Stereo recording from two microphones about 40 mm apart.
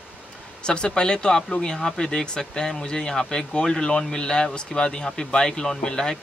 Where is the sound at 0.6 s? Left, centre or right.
Left.